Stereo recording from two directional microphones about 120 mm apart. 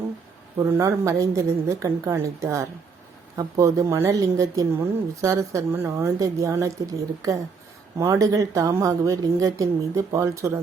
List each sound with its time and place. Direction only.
0.6 s a woman's voice: 25° right (ahead or behind)
7.9 s a woman's voice: 25° right (ahead or behind)